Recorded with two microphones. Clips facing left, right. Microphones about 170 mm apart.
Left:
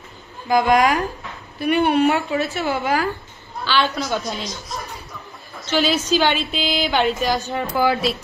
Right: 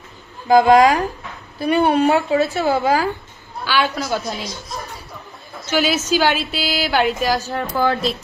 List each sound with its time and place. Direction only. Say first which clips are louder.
0.5 s a woman's voice: right 5 dB; 30° right (ahead or behind)
3.6 s a woman's voice: right 1 dB; 10° right (ahead or behind)
5.7 s a woman's voice: even; 10° right (ahead or behind)
7.5 s speech: even; 10° left (ahead or behind)